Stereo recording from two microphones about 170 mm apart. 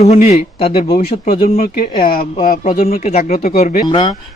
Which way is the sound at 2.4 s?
55° left (ahead or behind).